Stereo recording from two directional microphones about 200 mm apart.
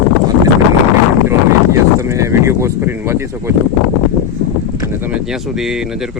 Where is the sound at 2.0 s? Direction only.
15° right (ahead or behind).